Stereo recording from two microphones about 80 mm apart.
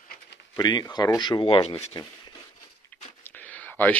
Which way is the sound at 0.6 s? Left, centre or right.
Left.